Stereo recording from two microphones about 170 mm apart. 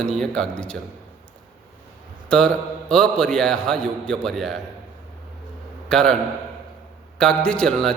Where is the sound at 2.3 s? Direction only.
5° left (ahead or behind).